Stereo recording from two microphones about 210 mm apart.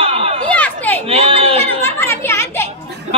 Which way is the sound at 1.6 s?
10° left (ahead or behind).